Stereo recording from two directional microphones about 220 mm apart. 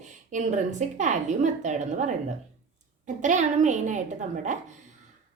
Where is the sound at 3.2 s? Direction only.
35° right (ahead or behind).